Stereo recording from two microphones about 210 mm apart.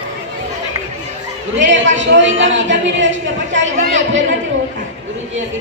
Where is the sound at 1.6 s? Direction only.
60° right (ahead or behind).